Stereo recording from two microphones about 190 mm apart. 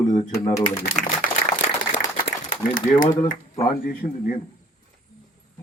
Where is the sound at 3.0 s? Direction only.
45° left (ahead or behind).